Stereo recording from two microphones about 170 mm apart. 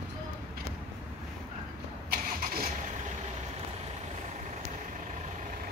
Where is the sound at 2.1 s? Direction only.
55° right (ahead or behind).